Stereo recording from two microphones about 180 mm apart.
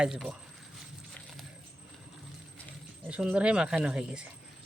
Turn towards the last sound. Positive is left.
turn(degrees=-5)  # may be behind; listen again after turning